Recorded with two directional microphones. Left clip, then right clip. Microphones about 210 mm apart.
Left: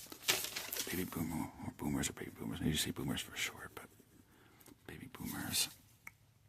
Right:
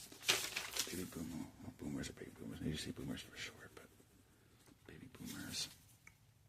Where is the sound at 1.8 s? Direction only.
35° left (ahead or behind).